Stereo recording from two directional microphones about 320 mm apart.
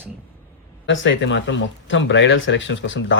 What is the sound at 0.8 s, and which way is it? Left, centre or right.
Speech, left.